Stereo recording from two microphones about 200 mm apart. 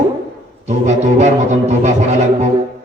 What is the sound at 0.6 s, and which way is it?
A man's voice, 35° right (ahead or behind).